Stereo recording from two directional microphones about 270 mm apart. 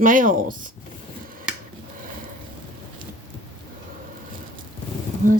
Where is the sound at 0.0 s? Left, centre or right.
Right.